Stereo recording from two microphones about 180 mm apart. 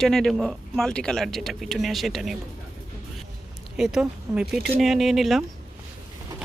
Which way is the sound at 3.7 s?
Centre (ahead or behind).